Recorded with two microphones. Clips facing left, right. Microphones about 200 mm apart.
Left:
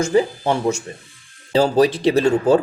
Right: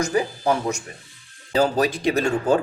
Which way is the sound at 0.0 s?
25° left (ahead or behind).